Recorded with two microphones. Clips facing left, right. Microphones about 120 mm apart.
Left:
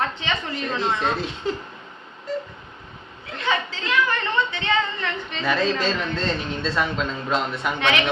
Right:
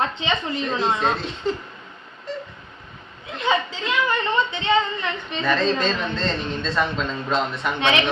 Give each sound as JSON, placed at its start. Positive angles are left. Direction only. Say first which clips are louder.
{"t": 0.0, "sound": "a woman's voice", "louder": "right 2 dB", "side_deg": -20}
{"t": 3.3, "sound": "a woman's voice", "louder": "right 3 dB", "side_deg": -20}
{"t": 5.4, "sound": "a woman's voice", "louder": "right 1 dB", "side_deg": 5}
{"t": 7.8, "sound": "a woman's voice", "louder": "right 2 dB", "side_deg": -20}